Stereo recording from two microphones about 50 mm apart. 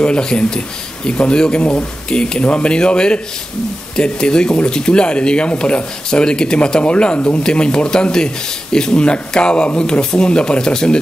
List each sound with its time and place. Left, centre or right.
0.0 s speech: centre